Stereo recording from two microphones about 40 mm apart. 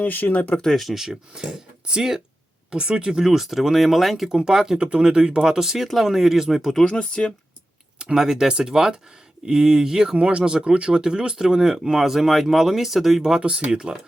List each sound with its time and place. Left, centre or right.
0.0 s speech: left
0.7 s speech: centre
4.8 s speech: right; by 6.8 s centre
6.8 s speech: centre
7.9 s a sound: right
8.2 s speech: centre
13.4 s speech: right
13.7 s speech: centre